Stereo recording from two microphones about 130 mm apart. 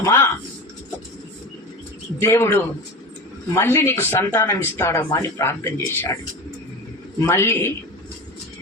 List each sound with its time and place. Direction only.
0.0 s a sound: 20° left (ahead or behind)
2.2 s speech: 20° left (ahead or behind)
7.3 s speech: 20° left (ahead or behind)